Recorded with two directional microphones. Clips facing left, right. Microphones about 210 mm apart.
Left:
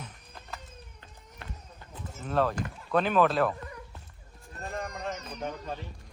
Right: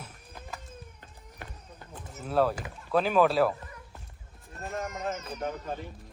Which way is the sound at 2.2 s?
10° right (ahead or behind).